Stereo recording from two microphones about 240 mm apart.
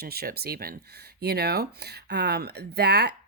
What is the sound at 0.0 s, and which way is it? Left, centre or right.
Speech, right.